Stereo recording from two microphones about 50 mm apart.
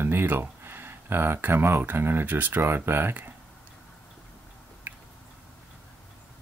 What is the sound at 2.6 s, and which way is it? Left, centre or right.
Speech, right.